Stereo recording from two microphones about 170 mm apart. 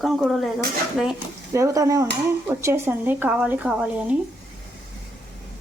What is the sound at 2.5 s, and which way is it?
Speech, 15° right (ahead or behind).